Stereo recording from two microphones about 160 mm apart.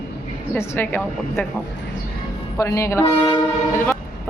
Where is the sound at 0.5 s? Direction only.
15° left (ahead or behind).